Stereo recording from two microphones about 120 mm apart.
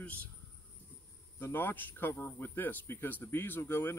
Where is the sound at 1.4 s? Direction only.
15° left (ahead or behind).